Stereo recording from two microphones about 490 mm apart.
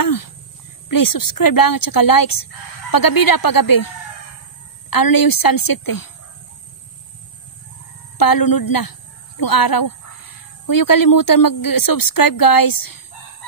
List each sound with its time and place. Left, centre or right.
0.0 s a woman's voice: left
8.2 s a woman's voice: left